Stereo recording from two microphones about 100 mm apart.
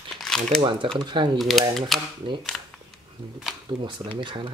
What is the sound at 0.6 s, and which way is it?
Speech, 55° right (ahead or behind).